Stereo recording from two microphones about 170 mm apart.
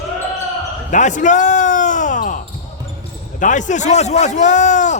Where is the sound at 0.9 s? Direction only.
45° left (ahead or behind).